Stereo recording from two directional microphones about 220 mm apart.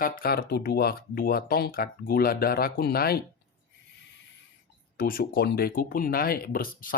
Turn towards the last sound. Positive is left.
turn(degrees=40)  # may be behind; listen again after turning